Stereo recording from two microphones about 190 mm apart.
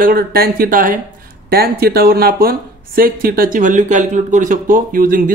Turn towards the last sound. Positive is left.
turn(degrees=-45)  # may be behind; listen again after turning